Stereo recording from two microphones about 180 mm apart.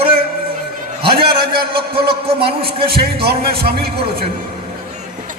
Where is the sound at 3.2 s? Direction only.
60° right (ahead or behind).